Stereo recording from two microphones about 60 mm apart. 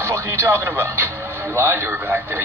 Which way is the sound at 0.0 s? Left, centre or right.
Right.